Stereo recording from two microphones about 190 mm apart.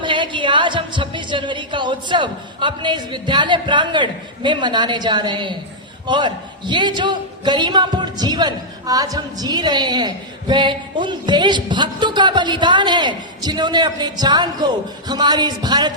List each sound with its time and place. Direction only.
0.0 s a man's voice: 25° right (ahead or behind)